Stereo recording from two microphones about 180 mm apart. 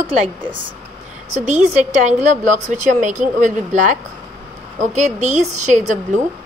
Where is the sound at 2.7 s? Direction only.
45° right (ahead or behind).